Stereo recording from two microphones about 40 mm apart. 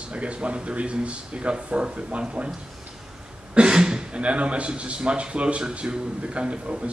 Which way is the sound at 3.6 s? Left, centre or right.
Centre.